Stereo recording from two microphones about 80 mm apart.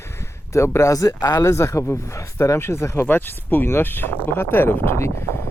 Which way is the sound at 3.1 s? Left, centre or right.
Left.